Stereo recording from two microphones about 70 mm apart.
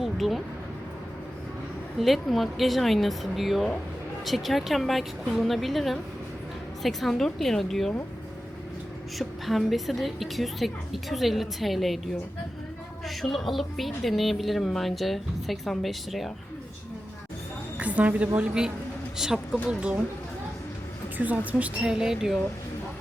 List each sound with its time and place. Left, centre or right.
0.0 s a sound: centre
2.0 s a woman's voice: centre
9.1 s a woman's voice: centre
13.1 s a woman's voice: centre
17.7 s a woman's voice: centre
21.2 s a woman's voice: right; by 22.4 s centre